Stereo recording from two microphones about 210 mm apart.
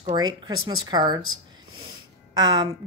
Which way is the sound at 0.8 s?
20° right (ahead or behind).